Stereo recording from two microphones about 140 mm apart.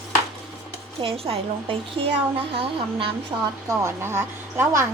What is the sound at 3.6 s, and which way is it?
A woman's voice, 20° right (ahead or behind).